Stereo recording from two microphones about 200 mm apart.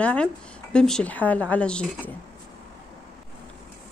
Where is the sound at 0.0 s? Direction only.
5° left (ahead or behind).